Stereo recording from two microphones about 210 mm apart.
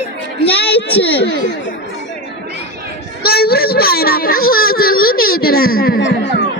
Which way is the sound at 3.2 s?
45° left (ahead or behind).